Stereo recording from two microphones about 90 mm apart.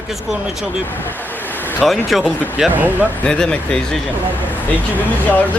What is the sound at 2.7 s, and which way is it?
Speech, 20° right (ahead or behind).